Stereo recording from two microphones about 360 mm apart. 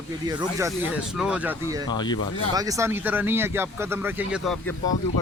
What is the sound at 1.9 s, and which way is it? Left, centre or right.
Speech, centre.